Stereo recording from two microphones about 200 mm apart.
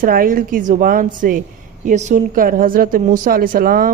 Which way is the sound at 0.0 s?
45° right (ahead or behind).